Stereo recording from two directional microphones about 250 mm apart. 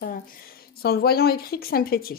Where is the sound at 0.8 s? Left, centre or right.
Left.